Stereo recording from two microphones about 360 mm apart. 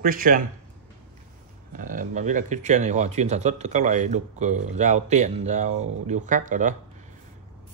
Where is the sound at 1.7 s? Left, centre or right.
Right.